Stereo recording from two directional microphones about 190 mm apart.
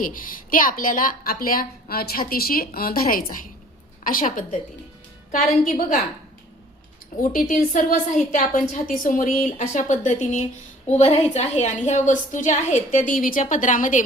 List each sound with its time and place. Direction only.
0.0 s a woman's voice: 45° left (ahead or behind)
7.2 s a woman's voice: 45° left (ahead or behind)